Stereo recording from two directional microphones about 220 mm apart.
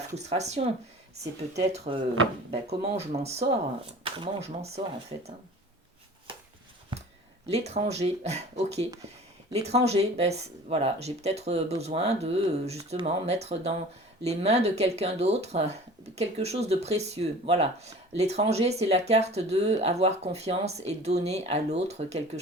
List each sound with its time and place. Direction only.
0.2 s speech: 30° right (ahead or behind)
1.7 s speech: 25° right (ahead or behind)
7.5 s speech: 30° right (ahead or behind)